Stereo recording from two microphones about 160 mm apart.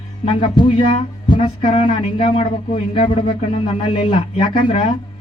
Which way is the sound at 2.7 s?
50° left (ahead or behind).